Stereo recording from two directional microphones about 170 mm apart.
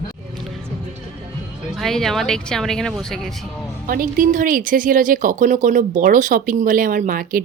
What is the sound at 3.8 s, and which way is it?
Speech, 55° right (ahead or behind).